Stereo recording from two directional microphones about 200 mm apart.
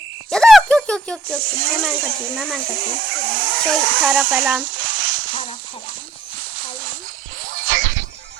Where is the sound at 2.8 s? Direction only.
50° right (ahead or behind).